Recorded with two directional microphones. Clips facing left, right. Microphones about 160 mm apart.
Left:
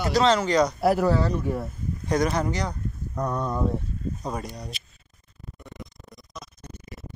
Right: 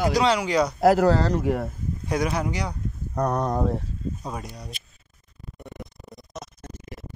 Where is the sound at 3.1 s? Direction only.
80° right.